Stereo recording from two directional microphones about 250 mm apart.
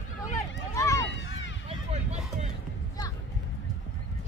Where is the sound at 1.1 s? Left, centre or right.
Left.